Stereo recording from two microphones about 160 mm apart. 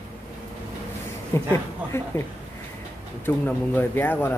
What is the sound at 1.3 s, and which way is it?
Speech, 15° left (ahead or behind).